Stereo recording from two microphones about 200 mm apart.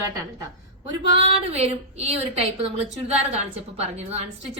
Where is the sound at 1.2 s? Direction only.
30° right (ahead or behind).